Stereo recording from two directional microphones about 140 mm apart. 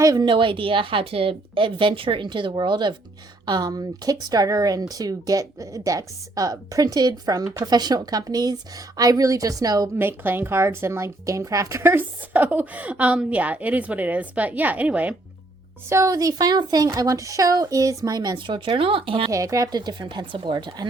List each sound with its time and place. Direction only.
0.0 s a woman's voice: 25° right (ahead or behind)
10.0 s a woman's voice: 15° right (ahead or behind)
15.9 s speech: 25° right (ahead or behind); by 19.3 s 40° right (ahead or behind)
19.3 s a woman's voice: 25° right (ahead or behind)